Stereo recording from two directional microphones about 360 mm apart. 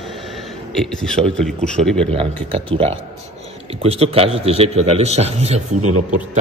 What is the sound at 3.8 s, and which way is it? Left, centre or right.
A man's voice, centre.